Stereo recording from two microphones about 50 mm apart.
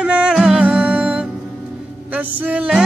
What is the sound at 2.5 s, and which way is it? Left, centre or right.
Music, right.